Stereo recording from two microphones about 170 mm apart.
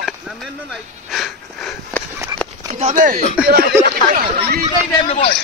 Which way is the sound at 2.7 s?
40° right (ahead or behind).